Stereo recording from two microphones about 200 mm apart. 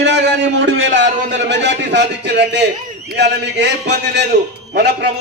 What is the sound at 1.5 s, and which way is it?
A man's voice, 60° right (ahead or behind).